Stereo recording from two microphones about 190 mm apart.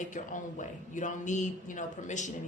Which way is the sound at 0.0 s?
40° left (ahead or behind).